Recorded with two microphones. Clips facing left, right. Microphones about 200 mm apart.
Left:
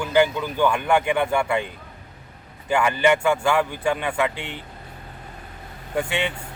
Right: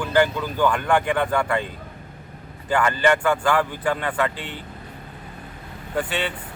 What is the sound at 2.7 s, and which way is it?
Speech, 10° left (ahead or behind).